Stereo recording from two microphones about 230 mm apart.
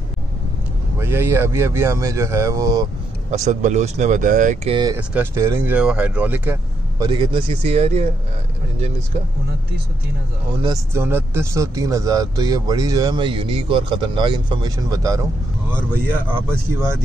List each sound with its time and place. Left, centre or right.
0.9 s speech: centre
3.4 s speech: right
4.7 s speech: centre
7.1 s speech: right
10.6 s speech: centre